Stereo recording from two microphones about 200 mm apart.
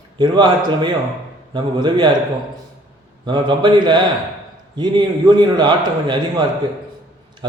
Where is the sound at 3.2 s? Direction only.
25° right (ahead or behind).